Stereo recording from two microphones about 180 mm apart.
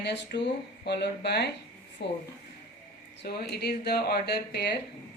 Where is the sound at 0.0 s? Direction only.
70° left (ahead or behind).